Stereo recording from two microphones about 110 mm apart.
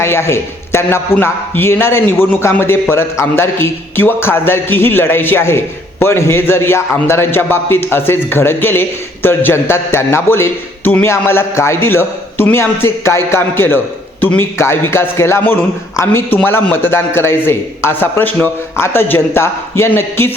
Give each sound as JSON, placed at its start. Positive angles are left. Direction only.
{"t": 0.0, "sound": "a man's voice", "side_deg": 25}